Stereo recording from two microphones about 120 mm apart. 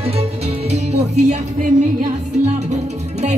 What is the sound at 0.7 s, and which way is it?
Speech, 65° right (ahead or behind).